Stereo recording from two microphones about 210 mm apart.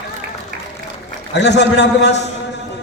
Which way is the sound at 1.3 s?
55° left (ahead or behind).